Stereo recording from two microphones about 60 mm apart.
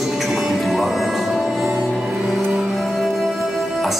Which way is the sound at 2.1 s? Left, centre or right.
Centre.